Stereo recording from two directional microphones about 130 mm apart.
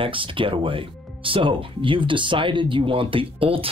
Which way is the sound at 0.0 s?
40° right (ahead or behind).